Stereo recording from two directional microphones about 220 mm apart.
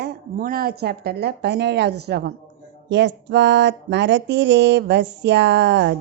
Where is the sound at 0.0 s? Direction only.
45° right (ahead or behind).